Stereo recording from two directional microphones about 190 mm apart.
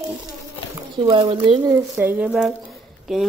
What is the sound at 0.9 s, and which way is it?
Speech, 25° right (ahead or behind).